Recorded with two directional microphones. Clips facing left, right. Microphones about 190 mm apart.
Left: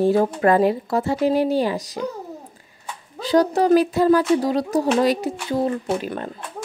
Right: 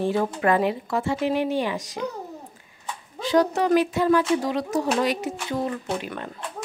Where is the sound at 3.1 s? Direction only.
35° left (ahead or behind).